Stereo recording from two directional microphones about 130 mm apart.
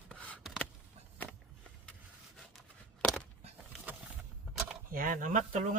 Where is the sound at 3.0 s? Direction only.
10° left (ahead or behind).